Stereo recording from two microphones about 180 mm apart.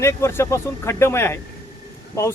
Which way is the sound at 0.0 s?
15° left (ahead or behind).